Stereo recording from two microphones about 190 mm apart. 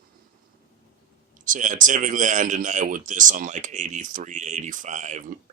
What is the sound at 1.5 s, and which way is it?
Speech, 40° right (ahead or behind).